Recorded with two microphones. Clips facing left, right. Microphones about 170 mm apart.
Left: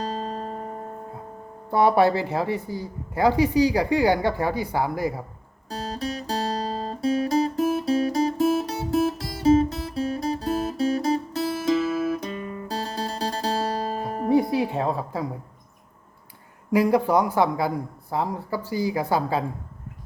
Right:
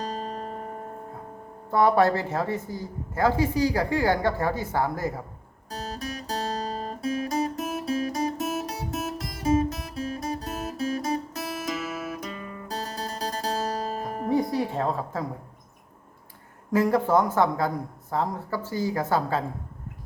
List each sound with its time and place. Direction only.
0.0 s music: 30° left (ahead or behind)
1.7 s speech: 15° left (ahead or behind)
5.6 s guitar: 30° left (ahead or behind)
14.6 s a woman's voice: 15° left (ahead or behind)
16.7 s speech: 15° left (ahead or behind)